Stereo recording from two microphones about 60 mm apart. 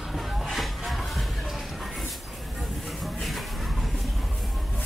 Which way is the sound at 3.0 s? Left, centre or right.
Centre.